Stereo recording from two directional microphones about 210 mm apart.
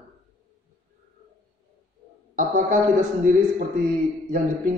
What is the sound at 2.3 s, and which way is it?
Speech, 40° right (ahead or behind).